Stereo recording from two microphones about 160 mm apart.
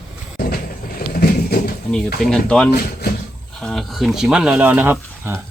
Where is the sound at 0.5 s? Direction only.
65° left (ahead or behind).